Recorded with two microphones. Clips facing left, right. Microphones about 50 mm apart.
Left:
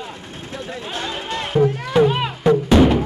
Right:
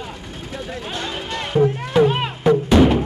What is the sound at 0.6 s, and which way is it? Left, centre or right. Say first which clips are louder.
Speech: even; left.